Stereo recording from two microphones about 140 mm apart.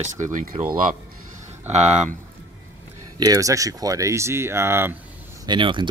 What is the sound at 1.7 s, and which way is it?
Speech, 55° right (ahead or behind).